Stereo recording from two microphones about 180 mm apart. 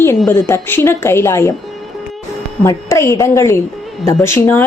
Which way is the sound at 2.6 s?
15° left (ahead or behind).